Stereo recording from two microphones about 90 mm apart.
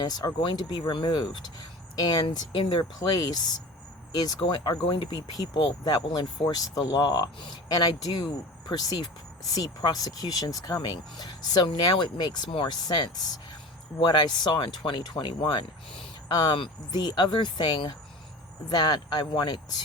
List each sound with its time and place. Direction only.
0.0 s speech: 50° left (ahead or behind)
2.3 s speech: 60° left (ahead or behind)